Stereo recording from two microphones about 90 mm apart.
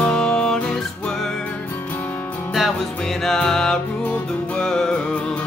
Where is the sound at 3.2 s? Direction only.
5° left (ahead or behind).